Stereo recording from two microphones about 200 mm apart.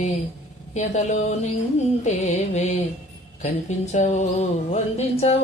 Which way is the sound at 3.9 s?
35° left (ahead or behind).